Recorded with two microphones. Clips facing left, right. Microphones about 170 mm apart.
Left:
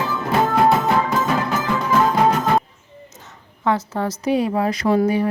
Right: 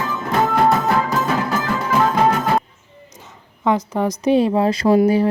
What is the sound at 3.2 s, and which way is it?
A woman's voice, 15° right (ahead or behind).